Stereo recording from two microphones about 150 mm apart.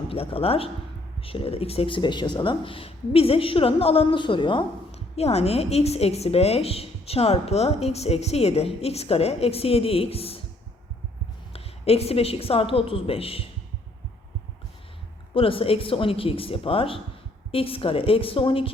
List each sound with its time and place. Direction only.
0.1 s speech: 40° left (ahead or behind)
11.5 s speech: 40° left (ahead or behind)
15.4 s speech: 35° left (ahead or behind)